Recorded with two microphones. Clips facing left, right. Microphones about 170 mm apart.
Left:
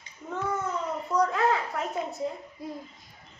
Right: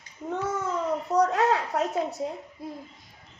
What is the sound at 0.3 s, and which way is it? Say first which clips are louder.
Child singing: right 3 dB; 70° right (ahead or behind).